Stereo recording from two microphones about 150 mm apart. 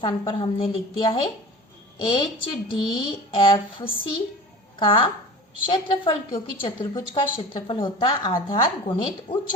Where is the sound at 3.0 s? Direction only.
35° left (ahead or behind).